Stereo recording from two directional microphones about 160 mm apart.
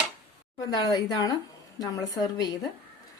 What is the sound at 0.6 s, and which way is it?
A woman's voice, 25° left (ahead or behind).